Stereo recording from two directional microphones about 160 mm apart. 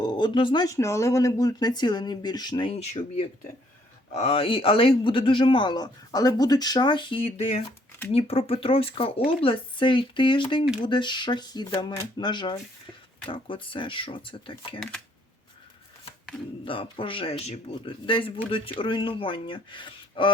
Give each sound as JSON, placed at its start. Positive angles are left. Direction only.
{"t": 0.0, "sound": "speech", "side_deg": 25}
{"t": 4.1, "sound": "speech", "side_deg": 40}
{"t": 16.6, "sound": "speech", "side_deg": 35}